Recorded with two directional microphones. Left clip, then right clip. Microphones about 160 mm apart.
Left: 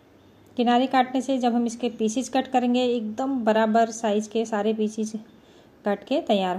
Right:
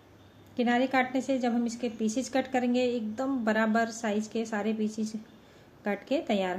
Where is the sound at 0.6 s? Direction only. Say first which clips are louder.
Left 6 dB; 25° left (ahead or behind).